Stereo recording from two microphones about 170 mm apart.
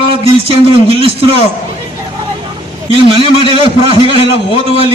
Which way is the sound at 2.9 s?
30° right (ahead or behind).